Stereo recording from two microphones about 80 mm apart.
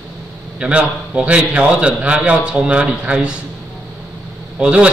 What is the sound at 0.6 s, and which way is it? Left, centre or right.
A man's voice, centre.